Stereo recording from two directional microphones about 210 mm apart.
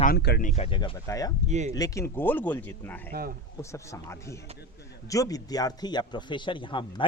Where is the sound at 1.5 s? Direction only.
35° right (ahead or behind).